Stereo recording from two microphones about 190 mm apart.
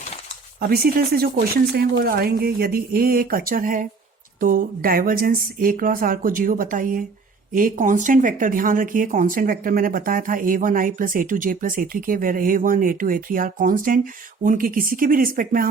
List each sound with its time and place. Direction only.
0.6 s speech: 55° right (ahead or behind)